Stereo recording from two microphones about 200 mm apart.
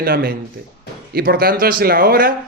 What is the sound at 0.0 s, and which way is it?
Speech, 45° right (ahead or behind).